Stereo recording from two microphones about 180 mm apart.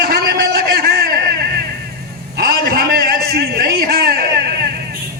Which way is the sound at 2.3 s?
55° right (ahead or behind).